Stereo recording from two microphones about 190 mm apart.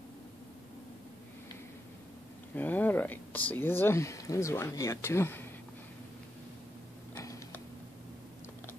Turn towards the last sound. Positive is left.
turn(degrees=15)  # may be behind; listen again after turning